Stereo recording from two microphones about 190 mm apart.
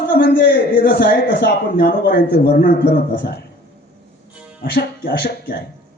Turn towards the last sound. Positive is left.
turn(degrees=60)  # may be behind; listen again after turning